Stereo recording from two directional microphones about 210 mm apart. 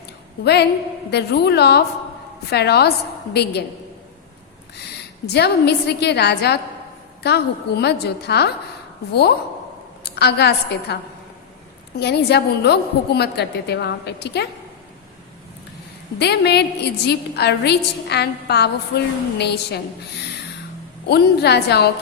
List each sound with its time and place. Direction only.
0.4 s a woman's voice: 50° left (ahead or behind)
5.2 s a woman's voice: 50° left (ahead or behind)
10.0 s a woman's voice: 50° left (ahead or behind)
11.9 s a woman's voice: 50° left (ahead or behind)
16.1 s a woman's voice: 50° left (ahead or behind)
21.1 s a woman's voice: 50° left (ahead or behind)